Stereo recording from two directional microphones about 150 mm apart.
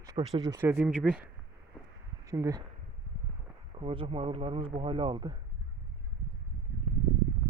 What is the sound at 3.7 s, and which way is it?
Speech, 35° right (ahead or behind).